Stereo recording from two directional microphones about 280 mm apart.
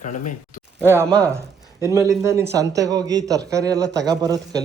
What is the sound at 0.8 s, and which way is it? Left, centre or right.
A man's voice, centre.